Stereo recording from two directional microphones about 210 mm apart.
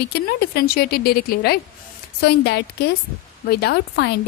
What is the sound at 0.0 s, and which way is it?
Speech, 50° left (ahead or behind).